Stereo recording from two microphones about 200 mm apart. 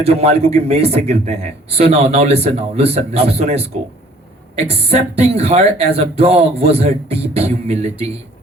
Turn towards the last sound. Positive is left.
turn(degrees=-30)  # may be behind; listen again after turning